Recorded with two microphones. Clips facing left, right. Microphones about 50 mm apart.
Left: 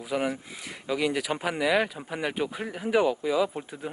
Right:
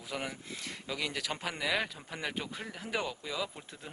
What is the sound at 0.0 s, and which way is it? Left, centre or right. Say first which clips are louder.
Speech: left 10 dB; centre.